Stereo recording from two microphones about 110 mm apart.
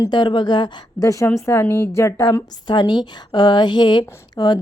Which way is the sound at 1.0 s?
30° left (ahead or behind).